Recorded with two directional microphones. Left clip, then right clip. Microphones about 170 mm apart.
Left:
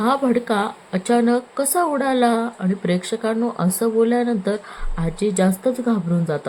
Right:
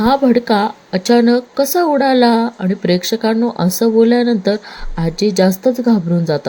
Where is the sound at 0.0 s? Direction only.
20° right (ahead or behind).